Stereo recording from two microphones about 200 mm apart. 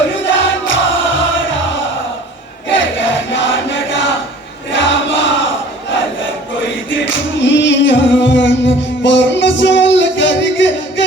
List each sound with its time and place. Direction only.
0.3 s music: 70° left (ahead or behind)
2.6 s a sound: 70° left (ahead or behind)
6.9 s music: 70° left (ahead or behind)